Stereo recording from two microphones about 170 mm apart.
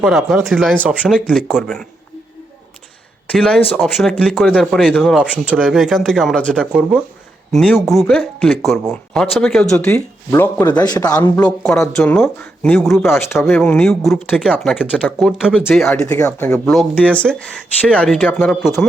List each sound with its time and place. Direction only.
0.0 s speech: centre (ahead or behind)
3.3 s speech: 5° left (ahead or behind); by 11.3 s 20° left (ahead or behind)
11.3 s speech: 5° left (ahead or behind)
13.1 s speech: 10° left (ahead or behind)